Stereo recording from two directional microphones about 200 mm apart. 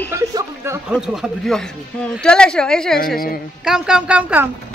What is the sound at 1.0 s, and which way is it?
Speech, centre (ahead or behind).